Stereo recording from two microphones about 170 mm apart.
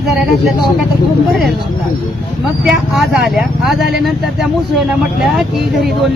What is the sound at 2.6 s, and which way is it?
Speech, 5° right (ahead or behind).